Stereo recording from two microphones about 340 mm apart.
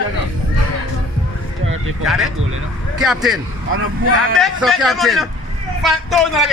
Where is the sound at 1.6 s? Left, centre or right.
Right.